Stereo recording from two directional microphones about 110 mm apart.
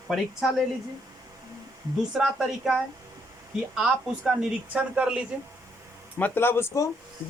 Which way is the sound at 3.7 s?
5° right (ahead or behind).